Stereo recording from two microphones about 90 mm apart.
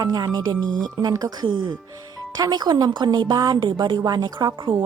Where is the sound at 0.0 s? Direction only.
45° right (ahead or behind).